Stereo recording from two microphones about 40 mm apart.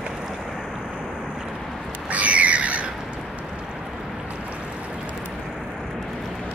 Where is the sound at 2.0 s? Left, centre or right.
Right.